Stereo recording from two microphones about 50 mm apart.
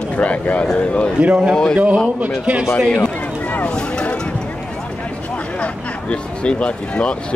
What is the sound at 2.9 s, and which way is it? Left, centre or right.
Run, left.